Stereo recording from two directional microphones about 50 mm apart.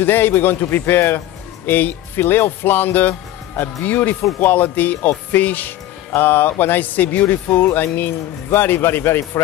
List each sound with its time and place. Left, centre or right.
0.0 s speech: left